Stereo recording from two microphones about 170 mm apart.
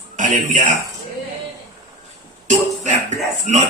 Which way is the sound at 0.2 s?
45° right (ahead or behind).